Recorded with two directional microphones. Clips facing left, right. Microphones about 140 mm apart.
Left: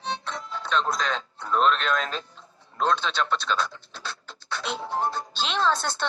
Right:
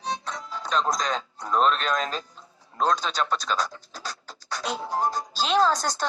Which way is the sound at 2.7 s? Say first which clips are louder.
Even; 40° right (ahead or behind).